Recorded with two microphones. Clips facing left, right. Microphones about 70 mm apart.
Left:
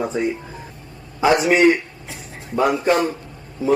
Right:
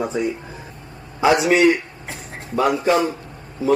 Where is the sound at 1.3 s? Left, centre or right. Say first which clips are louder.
Even; left.